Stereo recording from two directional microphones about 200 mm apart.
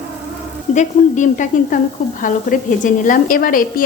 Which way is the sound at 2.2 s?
40° left (ahead or behind).